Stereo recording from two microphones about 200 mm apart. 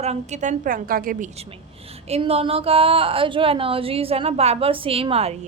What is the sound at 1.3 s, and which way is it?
A woman's voice, 30° right (ahead or behind).